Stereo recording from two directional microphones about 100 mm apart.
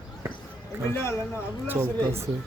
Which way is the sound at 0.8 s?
25° left (ahead or behind).